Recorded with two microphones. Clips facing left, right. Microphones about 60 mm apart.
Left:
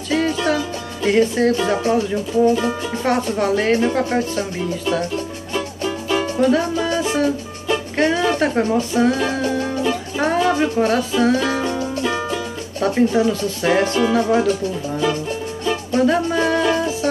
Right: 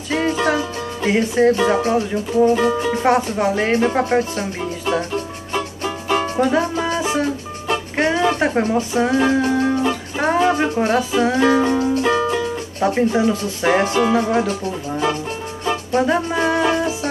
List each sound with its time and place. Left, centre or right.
0.5 s music: right
1.6 s music: right
3.0 s speech: centre
5.5 s music: right
6.5 s music: centre
7.9 s speech: centre
10.1 s music: centre
10.5 s speech: centre
11.3 s music: right
12.8 s speech: centre
15.6 s music: right